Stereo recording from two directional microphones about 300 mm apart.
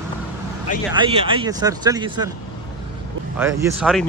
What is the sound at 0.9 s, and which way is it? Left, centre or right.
Speech, centre.